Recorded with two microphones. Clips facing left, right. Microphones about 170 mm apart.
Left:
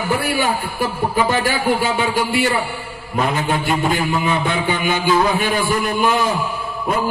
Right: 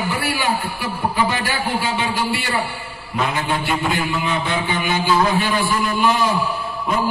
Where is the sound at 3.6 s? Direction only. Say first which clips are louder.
Left 3 dB; 45° left (ahead or behind).